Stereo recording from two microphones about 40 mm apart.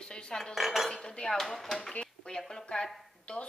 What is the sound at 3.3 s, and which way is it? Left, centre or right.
Speech, left.